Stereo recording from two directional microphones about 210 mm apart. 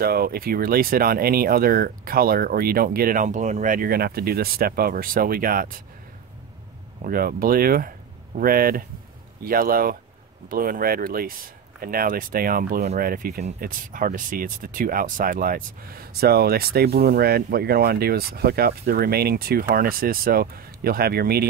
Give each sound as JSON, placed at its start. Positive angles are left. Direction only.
{"t": 0.0, "sound": "speech", "side_deg": -45}
{"t": 7.0, "sound": "speech", "side_deg": -45}